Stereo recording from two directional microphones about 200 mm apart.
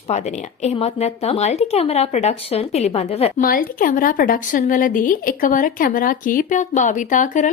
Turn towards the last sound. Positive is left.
turn(degrees=40)  # may be behind; listen again after turning